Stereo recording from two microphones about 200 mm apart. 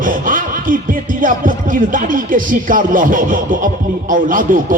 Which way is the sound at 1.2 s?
40° right (ahead or behind).